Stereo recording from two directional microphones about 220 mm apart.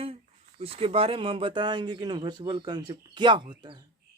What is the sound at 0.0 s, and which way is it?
Speech, 25° right (ahead or behind).